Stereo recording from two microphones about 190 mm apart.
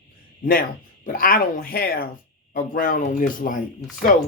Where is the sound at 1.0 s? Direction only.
45° left (ahead or behind).